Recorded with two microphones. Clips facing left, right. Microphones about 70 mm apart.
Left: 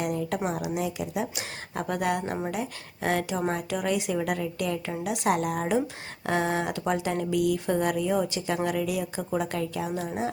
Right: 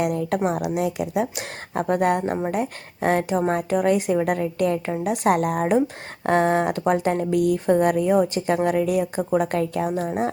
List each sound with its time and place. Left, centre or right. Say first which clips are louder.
0.0 s a woman's voice: right 6 dB; right
1.7 s a woman's voice: right 7 dB; right